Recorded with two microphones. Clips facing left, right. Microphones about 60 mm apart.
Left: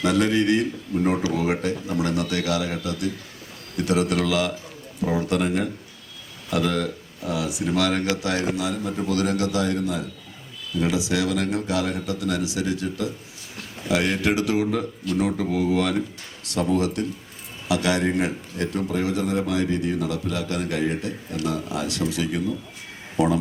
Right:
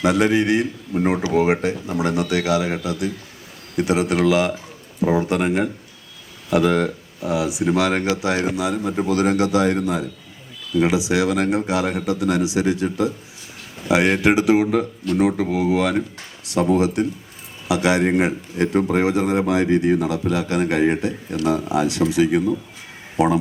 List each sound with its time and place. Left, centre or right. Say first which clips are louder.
0.0 s speech: right 3 dB; centre
6.5 s a man's voice: right 6 dB; right